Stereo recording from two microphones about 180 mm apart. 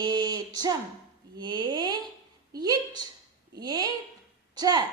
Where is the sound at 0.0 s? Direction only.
20° right (ahead or behind).